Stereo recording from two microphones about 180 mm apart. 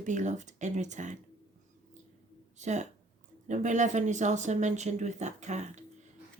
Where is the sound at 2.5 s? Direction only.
40° right (ahead or behind).